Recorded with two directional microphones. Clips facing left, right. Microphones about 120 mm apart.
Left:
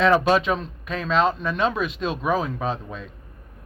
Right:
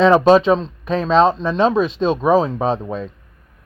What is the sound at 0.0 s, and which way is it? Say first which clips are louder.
Speech: right 7 dB; 30° right (ahead or behind).